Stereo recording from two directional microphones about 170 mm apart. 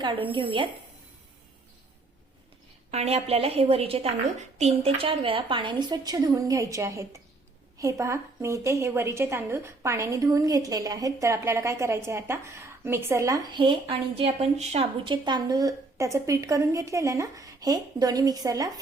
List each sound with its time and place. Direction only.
0.0 s a woman's voice: 30° right (ahead or behind)
2.9 s a woman's voice: 40° right (ahead or behind); by 18.7 s 20° right (ahead or behind)